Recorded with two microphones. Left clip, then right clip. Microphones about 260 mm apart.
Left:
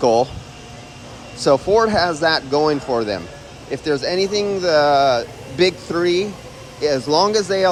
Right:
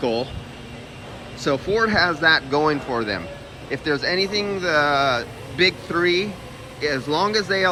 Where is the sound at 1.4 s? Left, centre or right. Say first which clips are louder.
Left 6 dB; centre.